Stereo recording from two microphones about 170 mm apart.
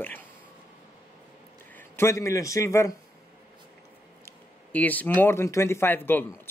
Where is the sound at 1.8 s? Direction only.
15° left (ahead or behind).